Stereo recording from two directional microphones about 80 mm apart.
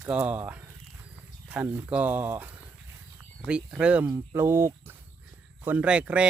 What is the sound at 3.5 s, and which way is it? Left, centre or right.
Speech, centre.